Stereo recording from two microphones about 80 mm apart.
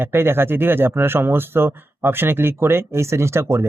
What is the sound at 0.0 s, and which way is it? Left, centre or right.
Speech, right.